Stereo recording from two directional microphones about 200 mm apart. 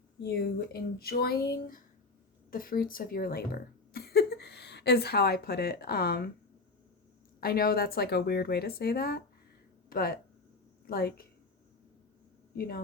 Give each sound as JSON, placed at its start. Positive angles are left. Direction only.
{"t": 0.2, "sound": "speech", "side_deg": 55}
{"t": 7.4, "sound": "speech", "side_deg": 50}
{"t": 12.5, "sound": "a woman's voice", "side_deg": 45}